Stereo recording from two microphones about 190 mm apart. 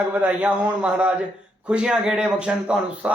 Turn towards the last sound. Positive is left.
turn(degrees=-5)  # may be behind; listen again after turning